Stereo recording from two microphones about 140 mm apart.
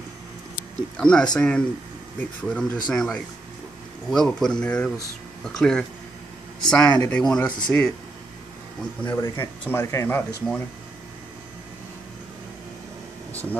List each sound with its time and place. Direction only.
0.6 s speech: 5° left (ahead or behind)
9.0 s speech: 30° left (ahead or behind)
9.7 s speech: 20° left (ahead or behind)
13.3 s air conditioning: 10° left (ahead or behind)